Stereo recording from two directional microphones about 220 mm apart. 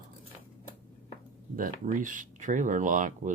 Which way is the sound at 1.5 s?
40° right (ahead or behind).